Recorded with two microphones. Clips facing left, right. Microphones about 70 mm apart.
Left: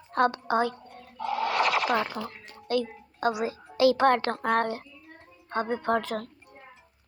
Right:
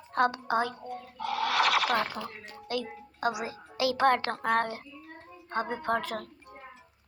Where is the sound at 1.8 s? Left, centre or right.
Centre.